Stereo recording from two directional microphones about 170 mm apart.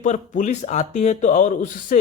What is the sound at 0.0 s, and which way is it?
Speech, 45° left (ahead or behind).